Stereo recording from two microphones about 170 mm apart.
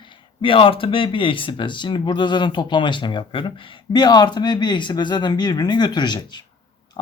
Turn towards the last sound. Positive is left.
turn(degrees=25)  # may be behind; listen again after turning